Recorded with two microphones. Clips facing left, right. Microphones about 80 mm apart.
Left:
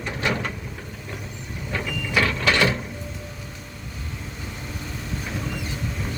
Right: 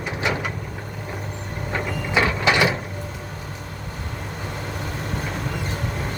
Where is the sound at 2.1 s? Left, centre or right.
Centre.